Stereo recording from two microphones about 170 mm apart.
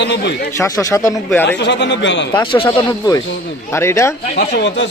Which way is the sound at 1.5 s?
90° left.